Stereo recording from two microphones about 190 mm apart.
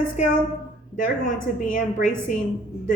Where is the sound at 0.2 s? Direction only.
40° left (ahead or behind).